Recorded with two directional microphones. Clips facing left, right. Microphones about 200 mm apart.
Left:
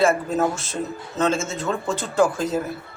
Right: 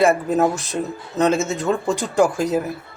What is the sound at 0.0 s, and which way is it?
Speech, 15° right (ahead or behind).